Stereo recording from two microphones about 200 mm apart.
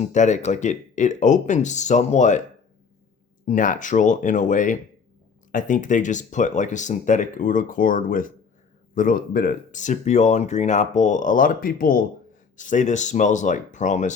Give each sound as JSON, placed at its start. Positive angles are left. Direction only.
{"t": 0.0, "sound": "speech", "side_deg": 35}
{"t": 3.4, "sound": "speech", "side_deg": 40}